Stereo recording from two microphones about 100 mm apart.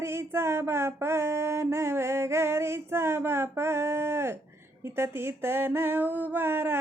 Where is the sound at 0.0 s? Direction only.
25° right (ahead or behind).